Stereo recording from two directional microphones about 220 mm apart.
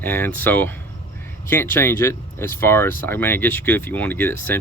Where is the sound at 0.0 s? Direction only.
10° left (ahead or behind).